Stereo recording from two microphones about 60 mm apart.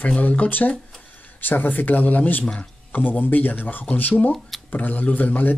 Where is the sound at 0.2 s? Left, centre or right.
Left.